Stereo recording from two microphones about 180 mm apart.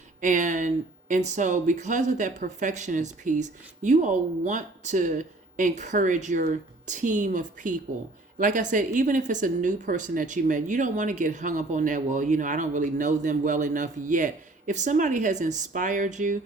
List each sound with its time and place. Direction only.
0.2 s speech: 45° right (ahead or behind)